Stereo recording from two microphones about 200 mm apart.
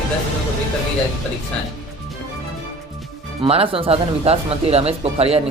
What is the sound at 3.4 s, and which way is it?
Speech, 25° right (ahead or behind).